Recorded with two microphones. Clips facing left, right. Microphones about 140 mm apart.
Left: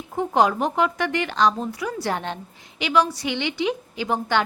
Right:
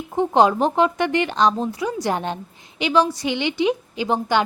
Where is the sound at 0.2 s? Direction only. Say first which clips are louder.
Right 4 dB; 25° right (ahead or behind).